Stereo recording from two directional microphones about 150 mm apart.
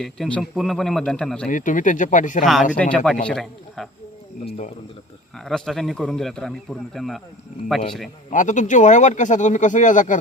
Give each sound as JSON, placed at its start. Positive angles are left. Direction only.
{"t": 0.0, "sound": "a man's voice", "side_deg": 5}
{"t": 1.5, "sound": "speech", "side_deg": 60}
{"t": 2.4, "sound": "a man's voice", "side_deg": 0}
{"t": 4.4, "sound": "speech", "side_deg": 55}
{"t": 5.5, "sound": "a man's voice", "side_deg": 0}
{"t": 8.3, "sound": "speech", "side_deg": 55}